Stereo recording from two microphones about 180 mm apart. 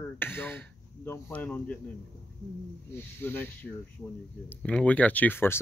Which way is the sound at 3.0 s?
10° left (ahead or behind).